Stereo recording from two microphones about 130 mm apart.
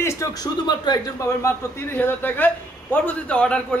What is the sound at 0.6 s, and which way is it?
Speech, 35° left (ahead or behind).